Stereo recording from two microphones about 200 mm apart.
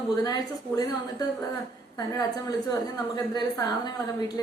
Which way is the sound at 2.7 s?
20° left (ahead or behind).